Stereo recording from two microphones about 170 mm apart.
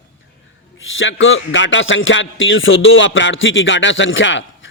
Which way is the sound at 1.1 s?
90° left.